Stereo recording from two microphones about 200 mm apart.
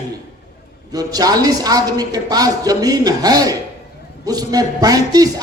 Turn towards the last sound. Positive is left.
turn(degrees=-20)  # may be behind; listen again after turning